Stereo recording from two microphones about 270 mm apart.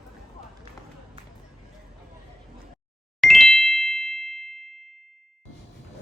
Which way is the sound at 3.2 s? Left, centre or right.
Centre.